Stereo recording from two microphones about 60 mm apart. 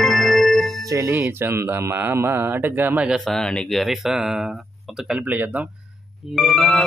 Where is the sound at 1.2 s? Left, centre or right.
Right.